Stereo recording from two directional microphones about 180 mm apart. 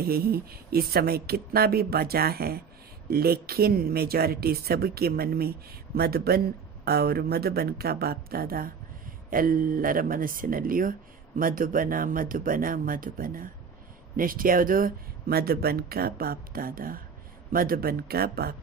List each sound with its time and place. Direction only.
0.0 s speech: 60° right (ahead or behind)